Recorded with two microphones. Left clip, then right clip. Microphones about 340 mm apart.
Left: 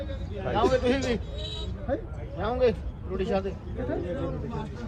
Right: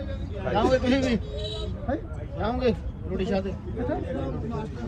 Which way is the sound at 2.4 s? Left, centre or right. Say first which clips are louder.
Left 1 dB; centre.